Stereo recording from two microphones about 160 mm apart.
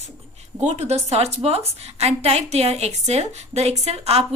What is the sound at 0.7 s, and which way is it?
A woman's voice, 40° right (ahead or behind).